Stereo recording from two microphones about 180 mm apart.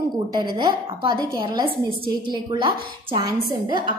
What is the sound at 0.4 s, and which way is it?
A woman's voice, 25° right (ahead or behind).